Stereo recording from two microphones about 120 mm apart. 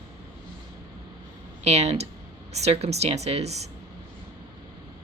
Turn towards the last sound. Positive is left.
turn(degrees=-65)  # may be behind; listen again after turning